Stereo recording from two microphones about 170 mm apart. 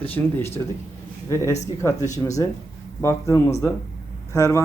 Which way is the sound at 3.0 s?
15° left (ahead or behind).